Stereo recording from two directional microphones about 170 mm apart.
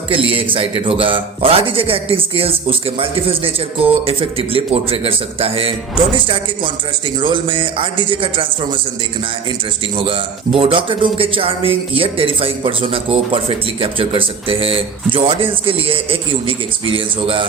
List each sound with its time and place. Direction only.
0.1 s a man's voice: 30° right (ahead or behind)
10.0 s a man's voice: 30° right (ahead or behind)